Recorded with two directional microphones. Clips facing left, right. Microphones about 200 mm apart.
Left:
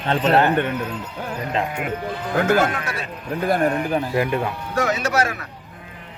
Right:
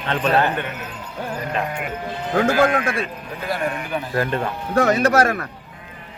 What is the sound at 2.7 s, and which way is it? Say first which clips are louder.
Speech: right 6 dB; 50° right (ahead or behind).